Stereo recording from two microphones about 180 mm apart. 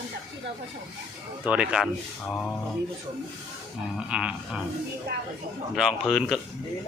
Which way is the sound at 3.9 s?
5° right (ahead or behind).